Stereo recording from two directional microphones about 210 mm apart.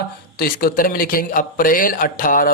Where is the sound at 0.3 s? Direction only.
45° left (ahead or behind).